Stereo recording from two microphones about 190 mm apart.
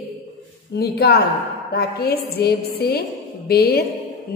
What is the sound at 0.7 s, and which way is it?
A woman's voice, 55° left (ahead or behind).